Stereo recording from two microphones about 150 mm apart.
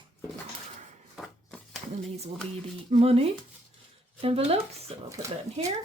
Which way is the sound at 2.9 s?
40° right (ahead or behind).